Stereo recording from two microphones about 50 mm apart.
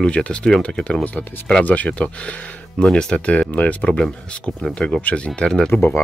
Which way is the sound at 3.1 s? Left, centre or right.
Left.